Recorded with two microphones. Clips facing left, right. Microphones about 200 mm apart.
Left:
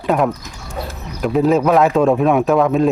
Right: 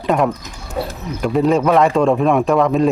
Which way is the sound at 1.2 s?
Centre (ahead or behind).